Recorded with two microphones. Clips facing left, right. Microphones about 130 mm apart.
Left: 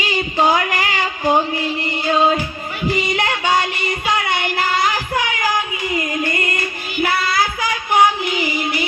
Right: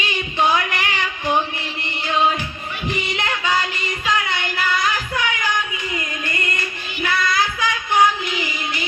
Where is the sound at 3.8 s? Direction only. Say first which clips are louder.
Left 3 dB; 30° left (ahead or behind).